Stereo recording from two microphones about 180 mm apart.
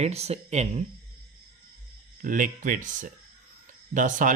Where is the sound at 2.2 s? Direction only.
50° right (ahead or behind).